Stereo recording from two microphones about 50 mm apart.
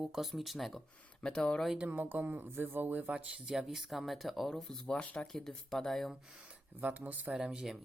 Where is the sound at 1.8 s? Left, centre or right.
Right.